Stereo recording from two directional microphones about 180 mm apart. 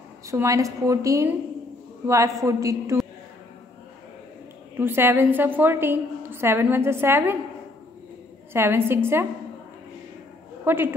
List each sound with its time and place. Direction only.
0.3 s a woman's voice: 15° right (ahead or behind)
4.7 s a woman's voice: 10° right (ahead or behind)
8.5 s a woman's voice: 15° right (ahead or behind)
10.6 s a man's voice: 10° right (ahead or behind)